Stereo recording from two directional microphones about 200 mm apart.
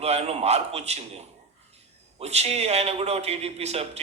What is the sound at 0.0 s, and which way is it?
A man's voice, 30° right (ahead or behind).